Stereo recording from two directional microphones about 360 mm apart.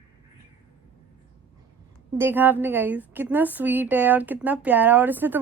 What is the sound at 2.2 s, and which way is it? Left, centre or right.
A woman's voice, centre.